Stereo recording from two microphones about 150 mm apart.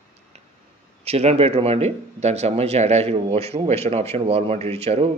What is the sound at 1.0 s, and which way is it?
Speech, 45° right (ahead or behind).